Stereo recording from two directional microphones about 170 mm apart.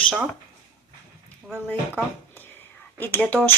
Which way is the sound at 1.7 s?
10° left (ahead or behind).